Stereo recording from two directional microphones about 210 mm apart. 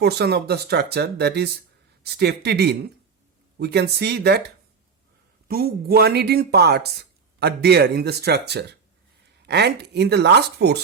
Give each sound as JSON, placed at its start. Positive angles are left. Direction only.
{"t": 0.0, "sound": "speech", "side_deg": -50}
{"t": 5.5, "sound": "speech", "side_deg": -45}